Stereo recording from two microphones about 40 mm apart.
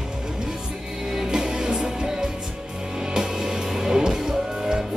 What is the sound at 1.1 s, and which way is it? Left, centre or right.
Music, centre.